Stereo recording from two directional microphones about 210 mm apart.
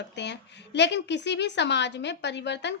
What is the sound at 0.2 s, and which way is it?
A woman's voice, 55° left (ahead or behind).